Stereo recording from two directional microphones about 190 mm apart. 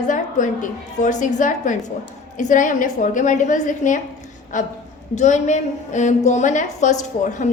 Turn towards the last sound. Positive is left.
turn(degrees=40)  # may be behind; listen again after turning